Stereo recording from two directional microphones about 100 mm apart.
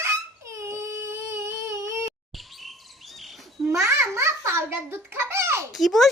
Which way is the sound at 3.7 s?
30° right (ahead or behind).